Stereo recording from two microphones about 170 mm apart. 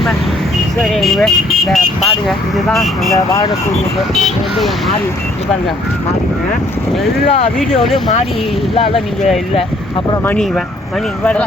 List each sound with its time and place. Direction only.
0.8 s speech: centre (ahead or behind)
3.2 s speech: 20° left (ahead or behind)
7.3 s speech: 40° left (ahead or behind)
7.7 s speech: centre (ahead or behind)
8.7 s speech: 35° left (ahead or behind)
11.2 s speech: 5° left (ahead or behind)